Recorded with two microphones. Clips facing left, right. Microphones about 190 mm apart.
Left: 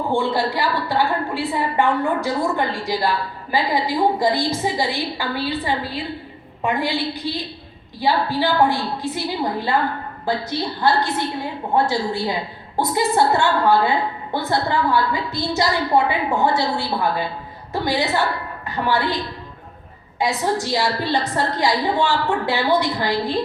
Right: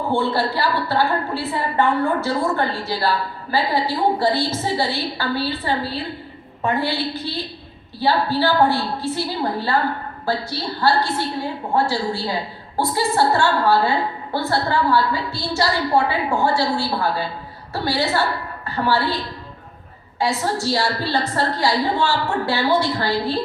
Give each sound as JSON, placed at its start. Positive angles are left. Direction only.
{"t": 0.1, "sound": "a woman's voice", "side_deg": 15}
{"t": 10.8, "sound": "a woman's voice", "side_deg": 20}
{"t": 20.1, "sound": "a woman's voice", "side_deg": 15}